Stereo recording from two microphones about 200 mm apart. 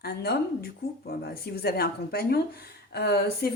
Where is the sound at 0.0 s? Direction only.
55° left (ahead or behind).